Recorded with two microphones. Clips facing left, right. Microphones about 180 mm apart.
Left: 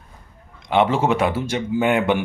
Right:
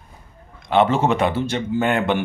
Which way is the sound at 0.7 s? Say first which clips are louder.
Right 1 dB; 10° left (ahead or behind).